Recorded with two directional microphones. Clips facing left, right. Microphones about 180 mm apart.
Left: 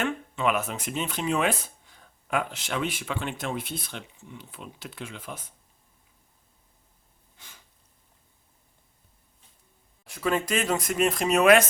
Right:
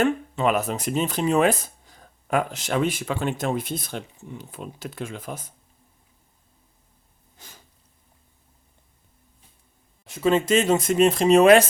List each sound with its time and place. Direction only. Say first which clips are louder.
0.0 s speech: right 6 dB; 40° right (ahead or behind)
7.3 s snort: right 5 dB; 40° right (ahead or behind)
10.0 s speech: right 6 dB; 25° right (ahead or behind)